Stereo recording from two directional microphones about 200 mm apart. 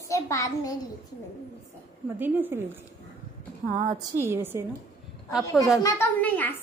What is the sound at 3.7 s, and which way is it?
Speech, 40° right (ahead or behind).